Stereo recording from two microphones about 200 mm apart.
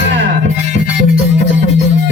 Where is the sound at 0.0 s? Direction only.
65° right (ahead or behind).